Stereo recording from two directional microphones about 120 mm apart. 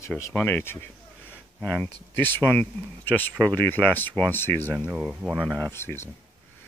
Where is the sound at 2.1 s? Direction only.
15° left (ahead or behind).